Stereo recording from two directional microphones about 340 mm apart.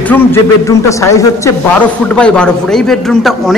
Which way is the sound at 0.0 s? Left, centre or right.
Centre.